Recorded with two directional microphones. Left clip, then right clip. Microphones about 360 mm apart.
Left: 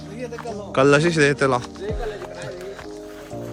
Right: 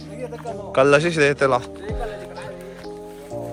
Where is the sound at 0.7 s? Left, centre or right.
Centre.